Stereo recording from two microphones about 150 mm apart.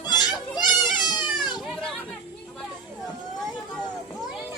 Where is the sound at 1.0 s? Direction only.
30° left (ahead or behind).